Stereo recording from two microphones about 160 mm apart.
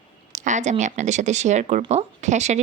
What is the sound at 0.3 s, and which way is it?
Speech, 50° right (ahead or behind).